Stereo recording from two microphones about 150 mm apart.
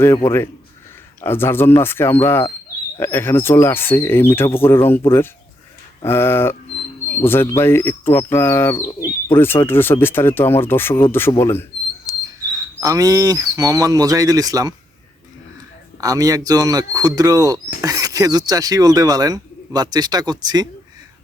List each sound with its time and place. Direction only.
0.3 s speech: 15° left (ahead or behind)
6.1 s speech: 15° left (ahead or behind)
12.8 s speech: 25° right (ahead or behind)
16.0 s speech: 25° right (ahead or behind)